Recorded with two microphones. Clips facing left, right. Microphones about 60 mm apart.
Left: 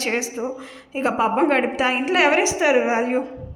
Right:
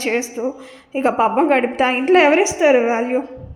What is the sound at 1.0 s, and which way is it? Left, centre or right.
A woman's voice, right.